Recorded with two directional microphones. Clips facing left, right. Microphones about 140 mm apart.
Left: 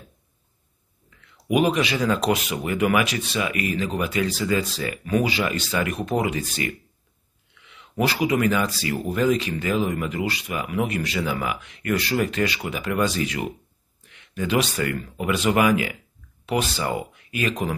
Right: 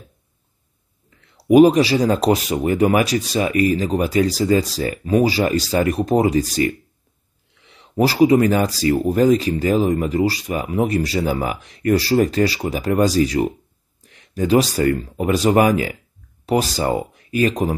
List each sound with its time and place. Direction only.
1.1 s speech: 35° right (ahead or behind)